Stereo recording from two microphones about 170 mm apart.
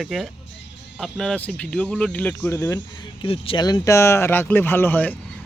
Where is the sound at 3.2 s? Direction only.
30° left (ahead or behind).